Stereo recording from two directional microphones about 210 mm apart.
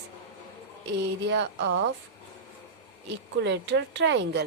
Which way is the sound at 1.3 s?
55° right (ahead or behind).